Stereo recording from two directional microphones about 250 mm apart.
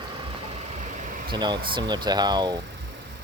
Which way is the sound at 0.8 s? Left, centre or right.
Right.